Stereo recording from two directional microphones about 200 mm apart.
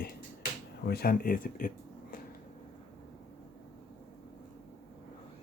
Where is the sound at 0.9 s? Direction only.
50° left (ahead or behind).